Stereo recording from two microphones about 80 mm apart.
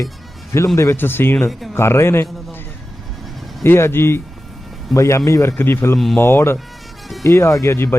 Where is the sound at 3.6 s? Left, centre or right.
Left.